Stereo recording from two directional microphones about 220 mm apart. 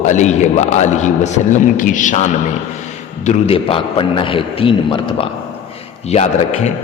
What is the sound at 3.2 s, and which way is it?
A man's voice, 25° left (ahead or behind).